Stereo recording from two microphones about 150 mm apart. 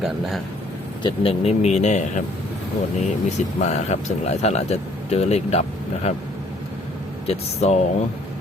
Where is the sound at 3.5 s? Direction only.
50° left (ahead or behind).